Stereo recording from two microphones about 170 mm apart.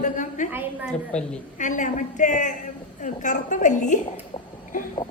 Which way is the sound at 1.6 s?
50° left (ahead or behind).